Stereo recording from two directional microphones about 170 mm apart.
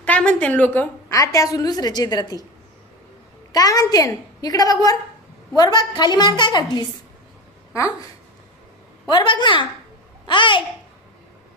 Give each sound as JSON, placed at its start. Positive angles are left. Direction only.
{"t": 0.0, "sound": "a woman's voice", "side_deg": 5}
{"t": 3.5, "sound": "a woman's voice", "side_deg": 20}
{"t": 9.0, "sound": "a woman's voice", "side_deg": 30}